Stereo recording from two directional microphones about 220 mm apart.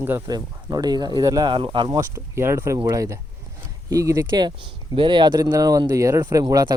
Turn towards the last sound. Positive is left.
turn(degrees=-15)  # may be behind; listen again after turning